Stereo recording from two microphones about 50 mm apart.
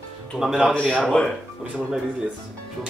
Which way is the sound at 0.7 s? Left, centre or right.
Centre.